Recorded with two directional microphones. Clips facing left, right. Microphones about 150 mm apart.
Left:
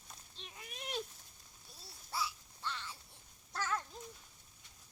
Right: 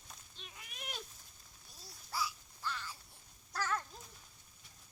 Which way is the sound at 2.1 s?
25° left (ahead or behind).